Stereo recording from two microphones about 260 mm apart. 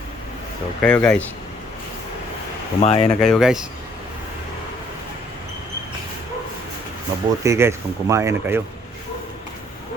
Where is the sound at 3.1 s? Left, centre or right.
Centre.